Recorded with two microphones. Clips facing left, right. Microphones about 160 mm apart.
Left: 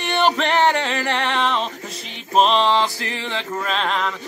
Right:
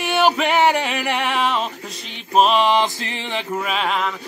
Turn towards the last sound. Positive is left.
turn(degrees=-5)  # may be behind; listen again after turning